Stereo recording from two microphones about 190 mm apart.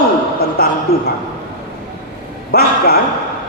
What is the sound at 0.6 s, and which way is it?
Speech, 55° left (ahead or behind).